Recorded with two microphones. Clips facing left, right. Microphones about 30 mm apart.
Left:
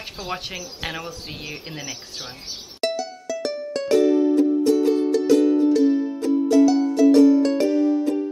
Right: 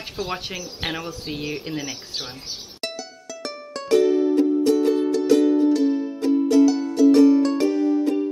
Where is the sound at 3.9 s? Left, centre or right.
Right.